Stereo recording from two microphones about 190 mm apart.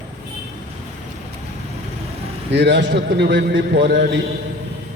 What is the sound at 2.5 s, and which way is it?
A man's voice, 65° right (ahead or behind).